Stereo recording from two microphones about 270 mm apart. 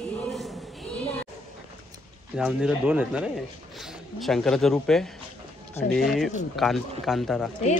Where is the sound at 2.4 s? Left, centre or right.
Centre.